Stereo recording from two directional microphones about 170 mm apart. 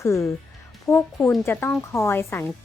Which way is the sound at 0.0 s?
15° left (ahead or behind).